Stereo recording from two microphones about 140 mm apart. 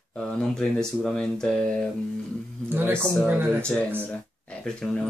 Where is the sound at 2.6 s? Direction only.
15° right (ahead or behind).